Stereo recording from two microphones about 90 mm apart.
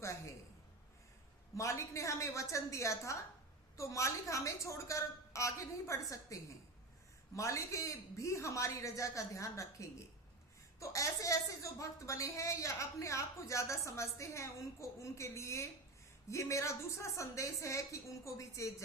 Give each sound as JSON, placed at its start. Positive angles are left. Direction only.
{"t": 1.5, "sound": "a woman's voice", "side_deg": 35}